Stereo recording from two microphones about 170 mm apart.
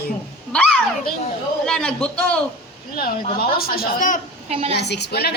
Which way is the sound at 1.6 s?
5° left (ahead or behind).